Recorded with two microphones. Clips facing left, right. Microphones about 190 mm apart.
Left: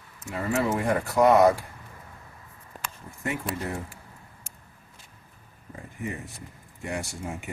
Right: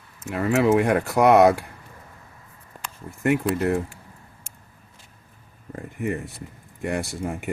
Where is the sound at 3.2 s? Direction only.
65° right (ahead or behind).